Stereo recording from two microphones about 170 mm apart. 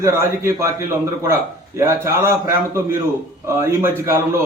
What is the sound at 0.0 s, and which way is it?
A man's voice, 15° right (ahead or behind).